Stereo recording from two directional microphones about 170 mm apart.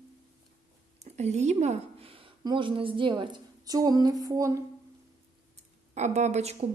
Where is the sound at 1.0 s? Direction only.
40° right (ahead or behind); by 4.6 s 20° right (ahead or behind).